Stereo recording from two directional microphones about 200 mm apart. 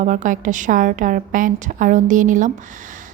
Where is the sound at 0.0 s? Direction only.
40° right (ahead or behind).